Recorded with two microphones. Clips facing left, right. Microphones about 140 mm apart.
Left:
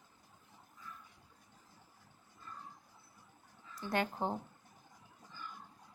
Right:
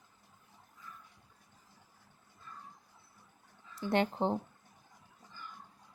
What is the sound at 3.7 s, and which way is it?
Speech, 25° right (ahead or behind).